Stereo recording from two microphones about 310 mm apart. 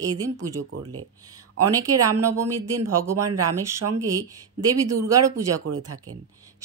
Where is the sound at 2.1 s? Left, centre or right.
Right.